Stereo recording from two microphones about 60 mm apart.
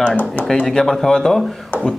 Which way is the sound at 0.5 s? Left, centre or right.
Centre.